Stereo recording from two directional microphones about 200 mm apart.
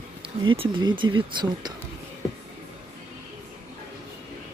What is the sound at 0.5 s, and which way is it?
Speech, 25° right (ahead or behind).